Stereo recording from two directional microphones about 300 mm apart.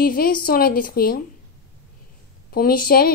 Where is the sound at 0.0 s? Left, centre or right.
Left.